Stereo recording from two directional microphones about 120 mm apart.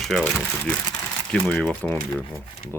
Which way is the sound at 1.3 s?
5° left (ahead or behind).